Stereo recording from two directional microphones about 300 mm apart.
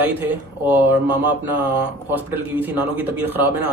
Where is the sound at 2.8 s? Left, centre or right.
Centre.